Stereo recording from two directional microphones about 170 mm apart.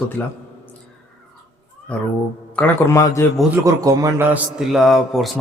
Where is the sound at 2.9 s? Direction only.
20° left (ahead or behind).